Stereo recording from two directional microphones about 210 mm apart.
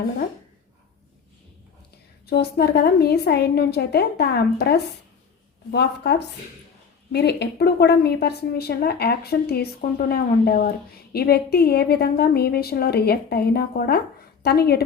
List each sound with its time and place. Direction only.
2.2 s a woman's voice: 50° left (ahead or behind)